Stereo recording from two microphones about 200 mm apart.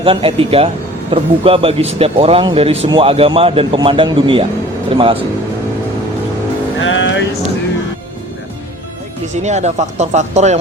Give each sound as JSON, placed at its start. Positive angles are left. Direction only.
{"t": 0.0, "sound": "speech", "side_deg": -25}
{"t": 6.7, "sound": "music", "side_deg": 70}
{"t": 9.3, "sound": "speech", "side_deg": -35}